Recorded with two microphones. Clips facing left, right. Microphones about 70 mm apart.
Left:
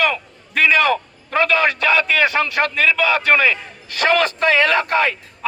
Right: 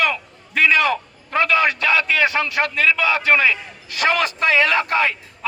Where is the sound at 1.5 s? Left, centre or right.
Left.